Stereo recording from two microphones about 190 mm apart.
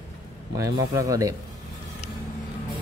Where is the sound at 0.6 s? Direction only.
15° right (ahead or behind).